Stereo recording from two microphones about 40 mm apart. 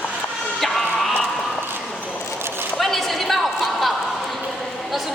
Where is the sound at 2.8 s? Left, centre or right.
Centre.